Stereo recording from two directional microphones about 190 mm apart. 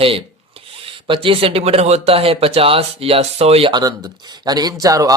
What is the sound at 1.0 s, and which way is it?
Speech, 25° right (ahead or behind).